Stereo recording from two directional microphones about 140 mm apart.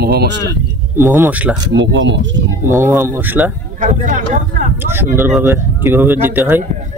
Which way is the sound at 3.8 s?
65° right (ahead or behind).